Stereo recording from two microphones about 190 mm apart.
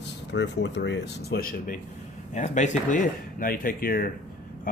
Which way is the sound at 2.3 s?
40° left (ahead or behind).